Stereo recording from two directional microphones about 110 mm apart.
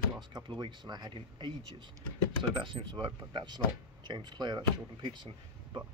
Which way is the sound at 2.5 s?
45° right (ahead or behind).